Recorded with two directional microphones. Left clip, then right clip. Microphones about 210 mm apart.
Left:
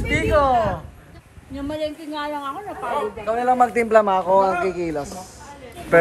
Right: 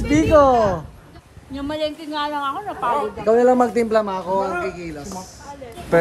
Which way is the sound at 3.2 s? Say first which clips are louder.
Right 3 dB; 30° right (ahead or behind).